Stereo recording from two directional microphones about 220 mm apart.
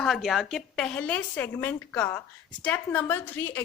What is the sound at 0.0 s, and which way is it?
A woman's voice, centre (ahead or behind).